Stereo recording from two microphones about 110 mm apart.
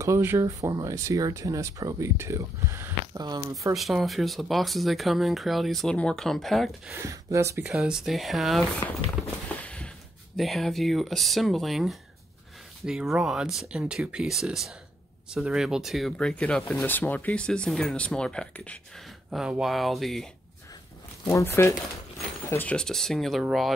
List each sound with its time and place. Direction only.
0.0 s speech: 25° right (ahead or behind)
0.5 s speech: 35° right (ahead or behind)
3.7 s speech: centre (ahead or behind)
6.9 s speech: 25° right (ahead or behind)
7.7 s speech: 5° right (ahead or behind)
9.6 s a sound: 10° left (ahead or behind)
10.3 s speech: centre (ahead or behind)
16.8 s speech: 15° left (ahead or behind)
19.3 s speech: 5° right (ahead or behind)
21.3 s speech: 25° left (ahead or behind)
22.5 s speech: 15° left (ahead or behind)